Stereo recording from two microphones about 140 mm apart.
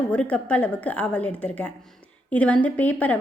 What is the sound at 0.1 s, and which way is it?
A woman's voice, 10° left (ahead or behind).